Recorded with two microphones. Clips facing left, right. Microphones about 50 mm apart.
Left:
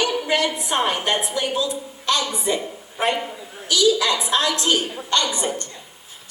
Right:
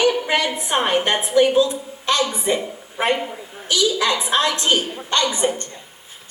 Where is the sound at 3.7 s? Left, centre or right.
Right.